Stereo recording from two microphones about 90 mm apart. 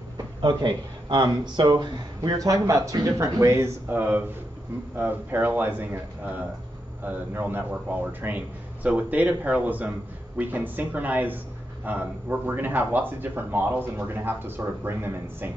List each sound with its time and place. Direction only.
0.4 s speech: 60° right (ahead or behind); by 4.0 s 30° right (ahead or behind)
4.9 s a man's voice: 20° right (ahead or behind)